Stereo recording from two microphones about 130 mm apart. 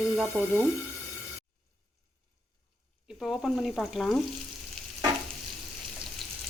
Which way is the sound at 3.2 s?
10° left (ahead or behind).